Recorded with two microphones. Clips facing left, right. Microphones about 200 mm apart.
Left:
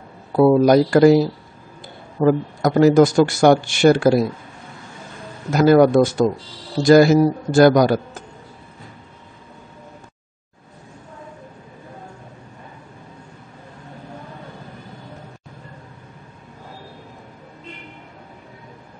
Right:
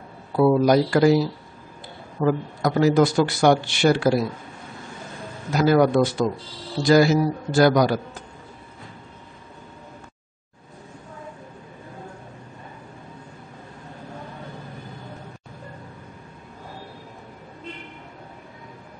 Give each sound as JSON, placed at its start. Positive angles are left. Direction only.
{"t": 0.4, "sound": "a man's voice", "side_deg": 45}
{"t": 2.2, "sound": "a man's voice", "side_deg": 45}
{"t": 5.5, "sound": "a man's voice", "side_deg": 50}